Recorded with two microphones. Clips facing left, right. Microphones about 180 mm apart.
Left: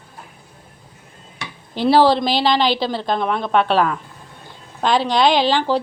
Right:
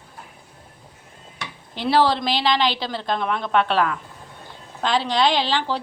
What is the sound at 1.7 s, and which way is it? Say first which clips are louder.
A woman's voice: left 5 dB; 35° left (ahead or behind).